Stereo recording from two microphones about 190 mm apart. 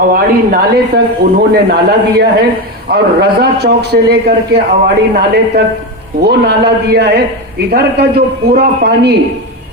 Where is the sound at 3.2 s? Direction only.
55° right (ahead or behind).